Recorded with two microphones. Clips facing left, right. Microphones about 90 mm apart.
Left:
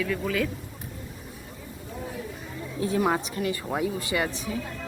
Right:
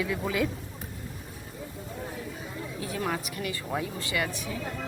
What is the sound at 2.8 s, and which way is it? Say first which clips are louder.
Speech: left 8 dB; 20° left (ahead or behind).